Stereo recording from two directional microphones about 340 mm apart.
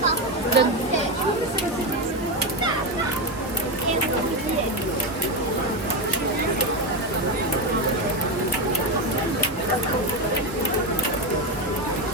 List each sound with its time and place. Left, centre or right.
0.6 s speech: right